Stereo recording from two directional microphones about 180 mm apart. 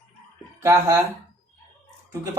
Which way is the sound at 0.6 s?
15° right (ahead or behind).